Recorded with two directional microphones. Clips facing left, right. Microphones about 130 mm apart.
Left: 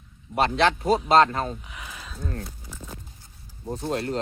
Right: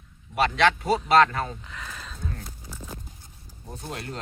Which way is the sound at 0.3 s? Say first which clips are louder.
Even; 35° left (ahead or behind).